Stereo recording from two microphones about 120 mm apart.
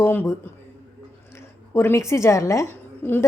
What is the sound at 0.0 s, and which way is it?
Speech, 20° left (ahead or behind).